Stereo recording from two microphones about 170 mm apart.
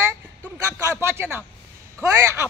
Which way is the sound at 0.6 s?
15° right (ahead or behind).